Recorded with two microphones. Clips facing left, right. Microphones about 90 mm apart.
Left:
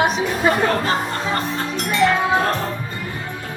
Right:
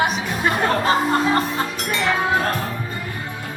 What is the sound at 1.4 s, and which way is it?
Music, 5° right (ahead or behind).